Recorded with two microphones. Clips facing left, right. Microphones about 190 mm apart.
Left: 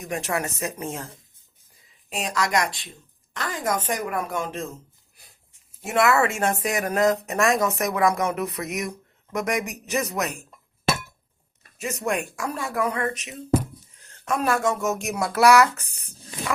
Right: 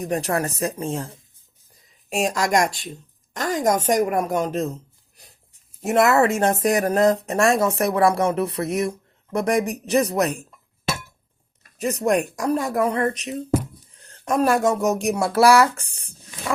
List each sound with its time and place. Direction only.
0.0 s speech: 35° right (ahead or behind)
2.0 s a woman's voice: 45° right (ahead or behind)
5.8 s speech: 40° right (ahead or behind)
11.8 s speech: 35° right (ahead or behind)